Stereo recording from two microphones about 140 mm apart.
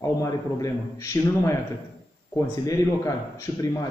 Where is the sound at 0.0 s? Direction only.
25° left (ahead or behind).